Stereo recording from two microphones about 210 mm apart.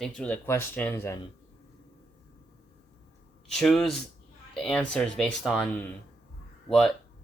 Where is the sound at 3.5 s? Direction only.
Centre (ahead or behind).